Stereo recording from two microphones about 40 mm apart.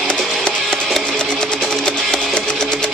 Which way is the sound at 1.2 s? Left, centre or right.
Centre.